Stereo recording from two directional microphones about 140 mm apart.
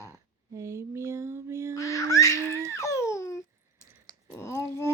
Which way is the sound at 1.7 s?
20° left (ahead or behind).